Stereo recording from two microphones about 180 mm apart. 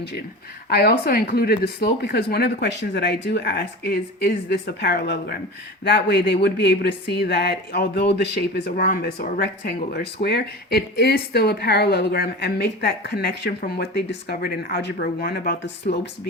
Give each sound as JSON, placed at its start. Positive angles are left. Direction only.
{"t": 0.7, "sound": "speech", "side_deg": 60}